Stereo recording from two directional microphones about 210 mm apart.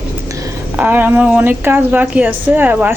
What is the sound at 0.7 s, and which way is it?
A woman's voice, 10° right (ahead or behind).